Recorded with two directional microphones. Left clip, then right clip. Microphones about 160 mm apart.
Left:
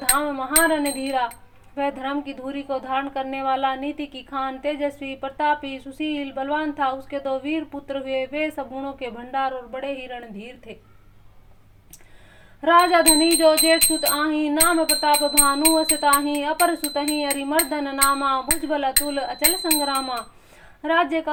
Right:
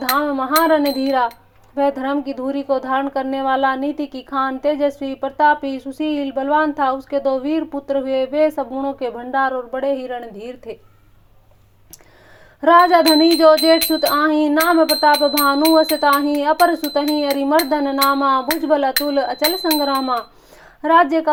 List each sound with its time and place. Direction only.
0.0 s speech: 30° right (ahead or behind)
12.6 s a sound: 30° right (ahead or behind)
20.8 s speech: 30° right (ahead or behind)